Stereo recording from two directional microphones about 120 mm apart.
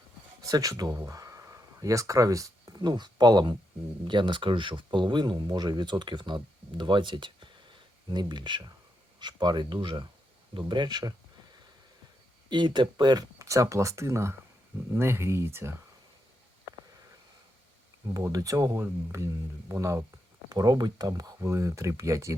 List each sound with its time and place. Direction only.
0.4 s speech: 30° right (ahead or behind)
12.5 s speech: 40° right (ahead or behind); by 15.7 s 20° right (ahead or behind)
18.1 s speech: 30° right (ahead or behind)
20.5 s speech: 35° right (ahead or behind)